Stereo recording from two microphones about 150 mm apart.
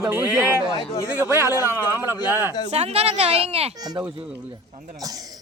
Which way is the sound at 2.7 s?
45° right (ahead or behind).